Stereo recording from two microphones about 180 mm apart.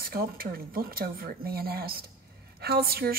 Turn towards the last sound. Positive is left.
turn(degrees=-55)  # may be behind; listen again after turning